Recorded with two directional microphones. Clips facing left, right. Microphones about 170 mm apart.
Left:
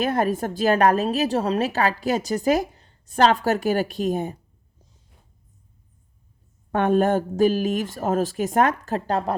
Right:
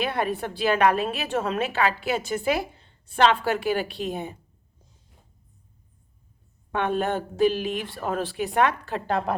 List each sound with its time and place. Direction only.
0.0 s a woman's voice: 45° left (ahead or behind)
6.7 s speech: 45° left (ahead or behind)